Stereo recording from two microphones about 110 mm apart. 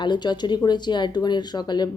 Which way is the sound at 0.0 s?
45° left (ahead or behind).